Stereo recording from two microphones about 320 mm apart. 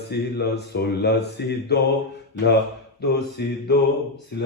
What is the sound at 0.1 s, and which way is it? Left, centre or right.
Speech, left.